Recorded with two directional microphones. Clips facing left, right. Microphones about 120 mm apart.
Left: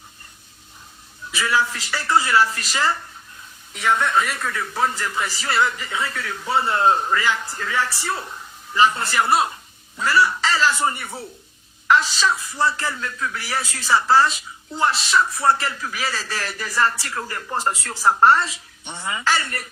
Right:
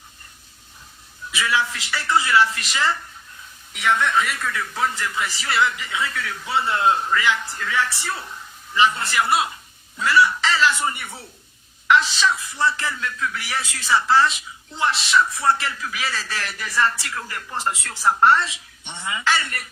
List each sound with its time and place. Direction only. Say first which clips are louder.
1.3 s speech: left 1 dB; 35° left (ahead or behind)
3.9 s speech: left 1 dB; 30° left (ahead or behind)
12.7 s speech: even; 30° left (ahead or behind)